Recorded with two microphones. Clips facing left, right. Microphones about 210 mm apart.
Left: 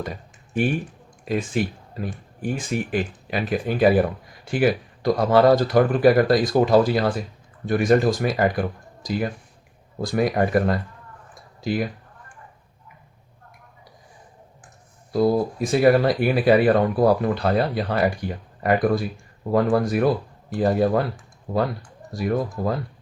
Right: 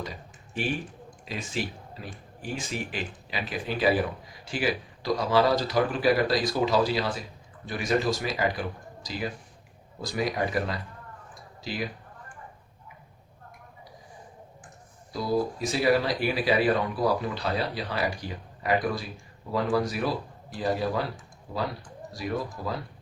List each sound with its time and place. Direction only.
0.0 s speech: 50° left (ahead or behind)
15.1 s speech: 55° left (ahead or behind)
22.1 s speech: 50° left (ahead or behind)